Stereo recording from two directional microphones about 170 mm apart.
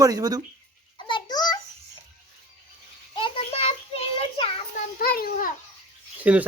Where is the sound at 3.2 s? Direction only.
35° left (ahead or behind).